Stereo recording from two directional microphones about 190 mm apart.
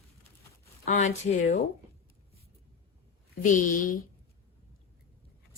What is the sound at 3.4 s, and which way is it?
Speech, 45° left (ahead or behind).